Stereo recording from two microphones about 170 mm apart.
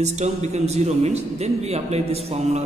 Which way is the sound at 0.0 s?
40° right (ahead or behind).